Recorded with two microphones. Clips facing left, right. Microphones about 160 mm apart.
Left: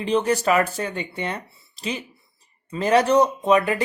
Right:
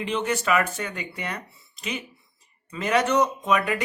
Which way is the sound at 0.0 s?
35° left (ahead or behind).